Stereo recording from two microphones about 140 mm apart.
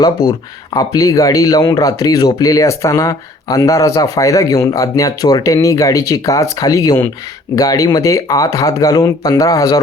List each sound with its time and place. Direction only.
0.0 s speech: 30° left (ahead or behind)